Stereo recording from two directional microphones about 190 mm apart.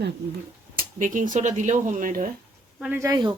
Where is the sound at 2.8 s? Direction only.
10° right (ahead or behind).